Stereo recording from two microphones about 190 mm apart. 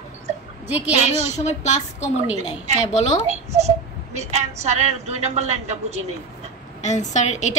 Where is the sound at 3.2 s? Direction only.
35° right (ahead or behind).